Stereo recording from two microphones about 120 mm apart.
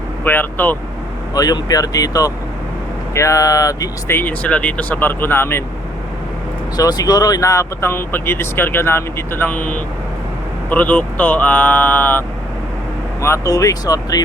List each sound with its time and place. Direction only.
0.3 s speech: 15° left (ahead or behind)
1.3 s speech: 35° left (ahead or behind)
4.2 s speech: 10° left (ahead or behind)
6.7 s speech: 30° left (ahead or behind); by 12.2 s 15° left (ahead or behind)
13.2 s speech: 25° left (ahead or behind)